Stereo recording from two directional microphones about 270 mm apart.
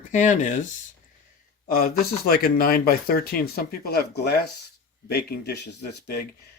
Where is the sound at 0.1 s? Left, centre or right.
Left.